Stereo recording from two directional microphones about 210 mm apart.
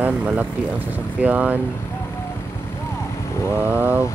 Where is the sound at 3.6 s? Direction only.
10° right (ahead or behind).